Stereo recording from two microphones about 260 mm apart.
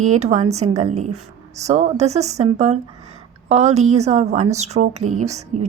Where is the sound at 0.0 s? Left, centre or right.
Right.